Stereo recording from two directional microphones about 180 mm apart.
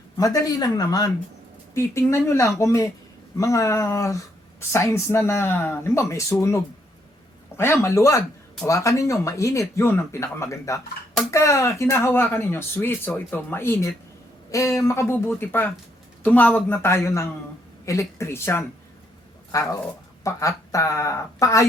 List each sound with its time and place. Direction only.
0.2 s speech: 20° left (ahead or behind)